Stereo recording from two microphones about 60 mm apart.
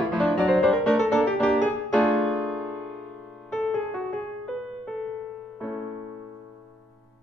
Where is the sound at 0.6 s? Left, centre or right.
Centre.